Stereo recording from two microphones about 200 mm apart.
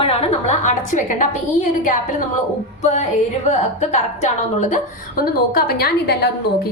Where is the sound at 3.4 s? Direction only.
35° left (ahead or behind).